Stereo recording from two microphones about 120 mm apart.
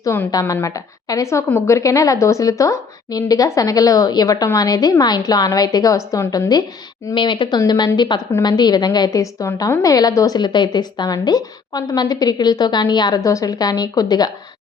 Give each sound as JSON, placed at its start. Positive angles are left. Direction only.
{"t": 0.0, "sound": "a woman's voice", "side_deg": 20}
{"t": 7.1, "sound": "a woman's voice", "side_deg": 45}
{"t": 7.6, "sound": "a woman's voice", "side_deg": 30}